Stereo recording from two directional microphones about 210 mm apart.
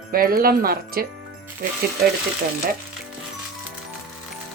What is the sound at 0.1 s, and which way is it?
Speech, 45° right (ahead or behind).